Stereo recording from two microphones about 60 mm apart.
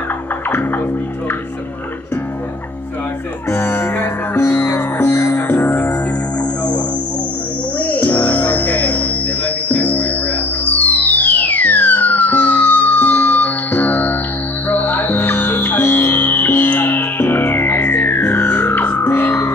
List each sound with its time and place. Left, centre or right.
3.5 s music: left
7.8 s music: left